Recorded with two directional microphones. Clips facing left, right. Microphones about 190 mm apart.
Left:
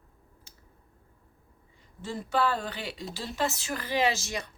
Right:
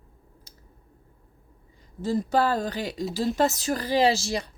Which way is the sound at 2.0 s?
40° right (ahead or behind).